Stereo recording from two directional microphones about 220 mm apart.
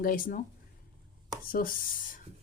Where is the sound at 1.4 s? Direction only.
40° left (ahead or behind).